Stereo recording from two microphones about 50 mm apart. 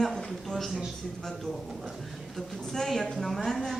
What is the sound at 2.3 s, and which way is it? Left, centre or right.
Speech, centre.